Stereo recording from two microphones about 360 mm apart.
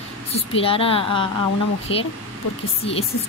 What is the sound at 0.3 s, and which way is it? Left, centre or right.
Speech, centre.